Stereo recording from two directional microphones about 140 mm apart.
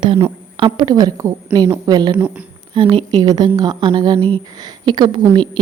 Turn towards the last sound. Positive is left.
turn(degrees=-35)  # may be behind; listen again after turning